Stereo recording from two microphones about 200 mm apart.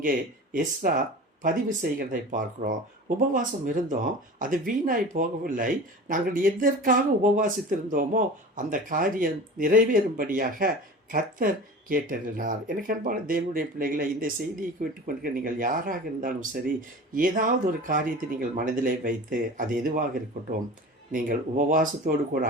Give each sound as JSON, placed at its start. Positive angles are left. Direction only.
{"t": 0.0, "sound": "speech", "side_deg": -40}